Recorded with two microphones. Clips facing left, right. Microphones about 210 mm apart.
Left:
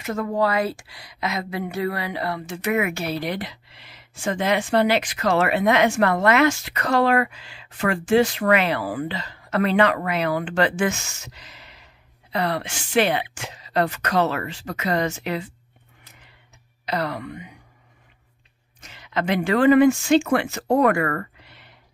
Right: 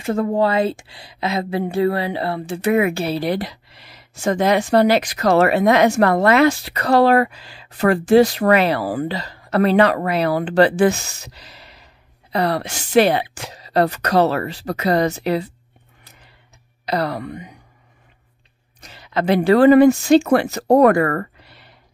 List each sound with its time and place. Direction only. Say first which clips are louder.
0.0 s speech: right 5 dB; 30° right (ahead or behind)
16.8 s speech: right 4 dB; 35° right (ahead or behind)
18.8 s speech: right 4 dB; 35° right (ahead or behind)